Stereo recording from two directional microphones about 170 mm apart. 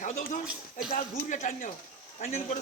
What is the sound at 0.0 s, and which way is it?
A man's voice, 50° left (ahead or behind).